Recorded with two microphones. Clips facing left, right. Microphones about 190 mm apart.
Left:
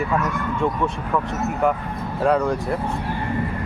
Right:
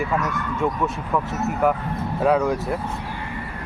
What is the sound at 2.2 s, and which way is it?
Speech, centre (ahead or behind).